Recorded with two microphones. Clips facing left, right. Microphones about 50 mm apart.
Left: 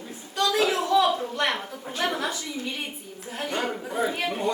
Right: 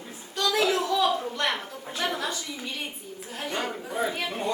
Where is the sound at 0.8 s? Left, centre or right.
Left.